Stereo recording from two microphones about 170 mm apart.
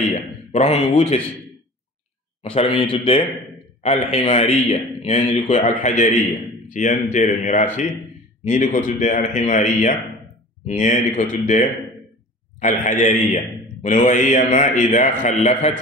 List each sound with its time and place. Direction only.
0.5 s a man's voice: 40° left (ahead or behind)
2.4 s a man's voice: 35° left (ahead or behind)